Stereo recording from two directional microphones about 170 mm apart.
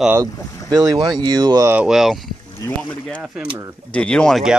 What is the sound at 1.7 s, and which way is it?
Speech, 5° right (ahead or behind).